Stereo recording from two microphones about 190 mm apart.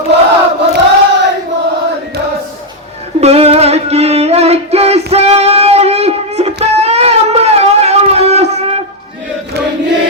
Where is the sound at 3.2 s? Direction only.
35° right (ahead or behind).